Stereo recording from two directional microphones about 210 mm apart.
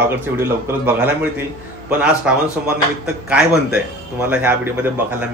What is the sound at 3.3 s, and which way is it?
Speech, 5° right (ahead or behind).